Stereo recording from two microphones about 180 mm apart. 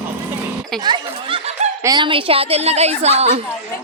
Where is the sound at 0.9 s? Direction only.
25° right (ahead or behind).